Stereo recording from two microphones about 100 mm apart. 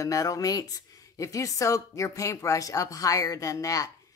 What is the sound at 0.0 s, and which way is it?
Speech, 35° left (ahead or behind).